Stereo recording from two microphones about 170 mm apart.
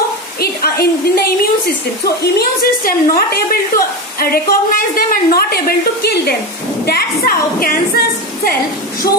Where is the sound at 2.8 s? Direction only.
60° left (ahead or behind).